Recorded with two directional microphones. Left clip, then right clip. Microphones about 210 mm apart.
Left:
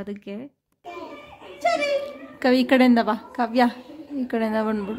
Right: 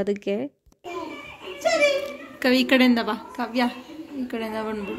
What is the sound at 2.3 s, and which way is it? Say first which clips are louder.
A woman's voice: left 1 dB; 30° left (ahead or behind).